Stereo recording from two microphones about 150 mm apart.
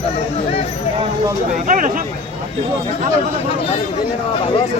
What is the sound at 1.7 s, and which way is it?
Speech, 65° right (ahead or behind).